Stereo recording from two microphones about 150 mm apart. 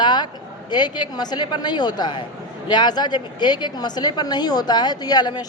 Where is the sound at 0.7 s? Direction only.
30° left (ahead or behind).